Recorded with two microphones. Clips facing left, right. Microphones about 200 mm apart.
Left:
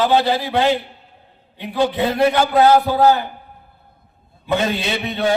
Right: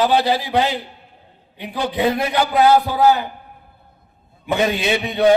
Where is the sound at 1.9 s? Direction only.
15° right (ahead or behind).